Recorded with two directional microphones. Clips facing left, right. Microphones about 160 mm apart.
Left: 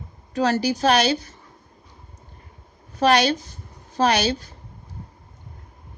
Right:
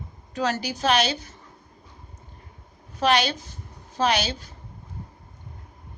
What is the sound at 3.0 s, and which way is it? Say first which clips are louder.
A woman's voice: left 4 dB; 40° left (ahead or behind).